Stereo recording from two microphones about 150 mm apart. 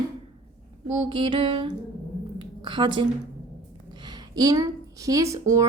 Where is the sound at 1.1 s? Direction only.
35° right (ahead or behind).